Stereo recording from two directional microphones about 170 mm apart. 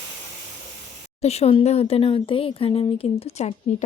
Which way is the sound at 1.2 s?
40° left (ahead or behind).